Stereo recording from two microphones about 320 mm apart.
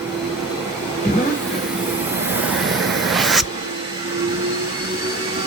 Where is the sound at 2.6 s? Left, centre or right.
Centre.